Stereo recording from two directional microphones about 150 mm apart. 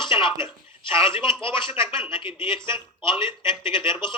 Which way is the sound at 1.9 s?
35° left (ahead or behind).